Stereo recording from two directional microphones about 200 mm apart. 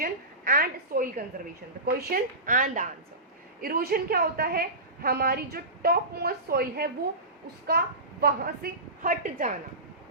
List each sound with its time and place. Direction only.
0.0 s a woman's voice: 45° right (ahead or behind)